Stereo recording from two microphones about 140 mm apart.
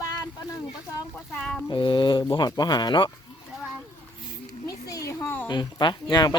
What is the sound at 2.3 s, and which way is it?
Speech, 30° left (ahead or behind).